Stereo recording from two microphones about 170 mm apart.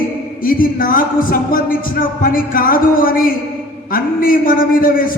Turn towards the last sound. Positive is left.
turn(degrees=55)  # may be behind; listen again after turning